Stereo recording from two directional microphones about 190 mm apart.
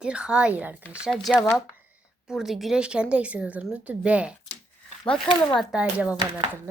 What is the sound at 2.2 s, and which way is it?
Speech, centre (ahead or behind).